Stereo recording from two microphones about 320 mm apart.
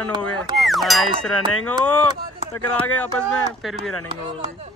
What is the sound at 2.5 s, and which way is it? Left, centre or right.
Speech, centre.